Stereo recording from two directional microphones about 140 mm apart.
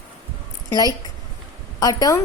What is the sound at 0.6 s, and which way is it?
A woman's voice, 25° left (ahead or behind).